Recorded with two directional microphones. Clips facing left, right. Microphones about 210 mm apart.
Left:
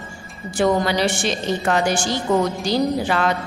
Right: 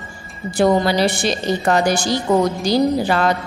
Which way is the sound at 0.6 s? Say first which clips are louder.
Right 3 dB; 35° right (ahead or behind).